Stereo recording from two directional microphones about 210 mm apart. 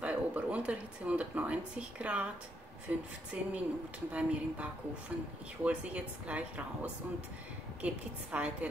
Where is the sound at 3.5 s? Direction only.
5° right (ahead or behind).